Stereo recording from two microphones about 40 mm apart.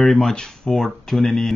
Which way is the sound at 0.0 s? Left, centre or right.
Centre.